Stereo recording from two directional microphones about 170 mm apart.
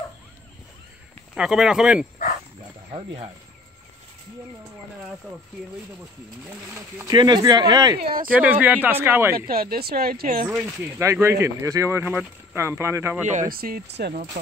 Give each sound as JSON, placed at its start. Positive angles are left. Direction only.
{"t": 1.3, "sound": "speech", "side_deg": -5}
{"t": 2.9, "sound": "speech", "side_deg": -30}
{"t": 7.1, "sound": "speech", "side_deg": -25}
{"t": 8.3, "sound": "speech", "side_deg": -10}
{"t": 9.3, "sound": "speech", "side_deg": -60}
{"t": 10.6, "sound": "speech", "side_deg": -15}
{"t": 13.3, "sound": "speech", "side_deg": -55}